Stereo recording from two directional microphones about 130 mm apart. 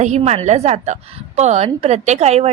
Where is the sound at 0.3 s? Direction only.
60° right (ahead or behind).